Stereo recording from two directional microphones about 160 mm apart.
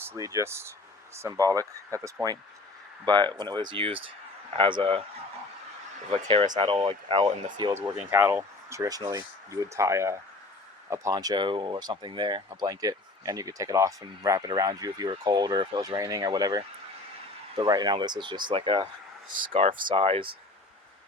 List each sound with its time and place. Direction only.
0.0 s a man's voice: 15° right (ahead or behind); by 5.0 s 35° right (ahead or behind)
6.1 s a man's voice: 35° right (ahead or behind)
7.7 s speech: 15° right (ahead or behind); by 18.9 s 30° right (ahead or behind)
19.9 s a man's voice: 35° right (ahead or behind)